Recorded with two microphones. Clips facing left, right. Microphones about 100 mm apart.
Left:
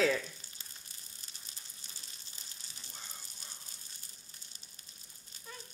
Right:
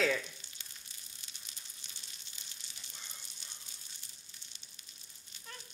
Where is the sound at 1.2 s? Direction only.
40° left (ahead or behind).